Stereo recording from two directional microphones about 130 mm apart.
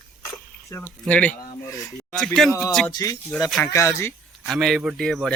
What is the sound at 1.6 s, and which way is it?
Speech, 25° left (ahead or behind).